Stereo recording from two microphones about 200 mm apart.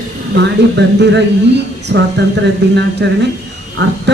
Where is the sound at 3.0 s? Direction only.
55° right (ahead or behind).